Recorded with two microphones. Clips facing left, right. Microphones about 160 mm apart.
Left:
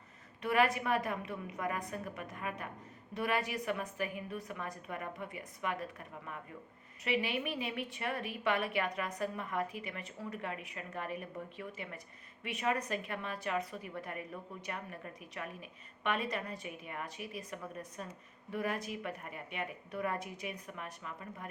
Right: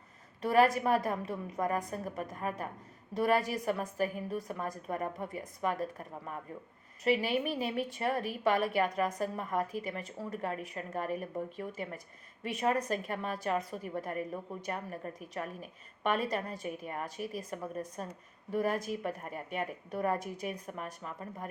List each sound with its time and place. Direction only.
0.4 s a woman's voice: 40° right (ahead or behind)